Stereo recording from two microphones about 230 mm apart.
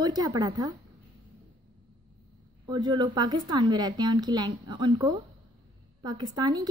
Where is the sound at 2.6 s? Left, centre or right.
Centre.